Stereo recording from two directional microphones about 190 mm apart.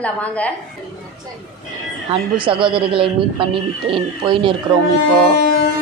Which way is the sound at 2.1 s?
25° right (ahead or behind).